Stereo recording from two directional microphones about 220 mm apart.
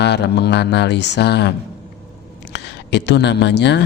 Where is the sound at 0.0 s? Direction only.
50° left (ahead or behind).